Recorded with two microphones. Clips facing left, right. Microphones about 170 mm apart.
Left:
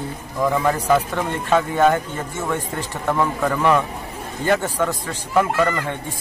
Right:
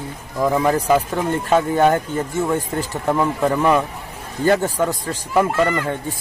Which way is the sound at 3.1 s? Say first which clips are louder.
Right 2 dB; 20° right (ahead or behind).